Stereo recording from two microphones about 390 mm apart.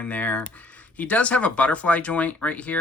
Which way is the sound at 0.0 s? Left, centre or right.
Centre.